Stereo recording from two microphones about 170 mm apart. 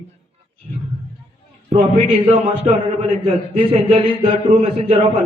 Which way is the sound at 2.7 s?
40° right (ahead or behind).